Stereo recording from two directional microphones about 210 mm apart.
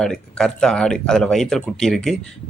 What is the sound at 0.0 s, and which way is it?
Speech, 5° left (ahead or behind).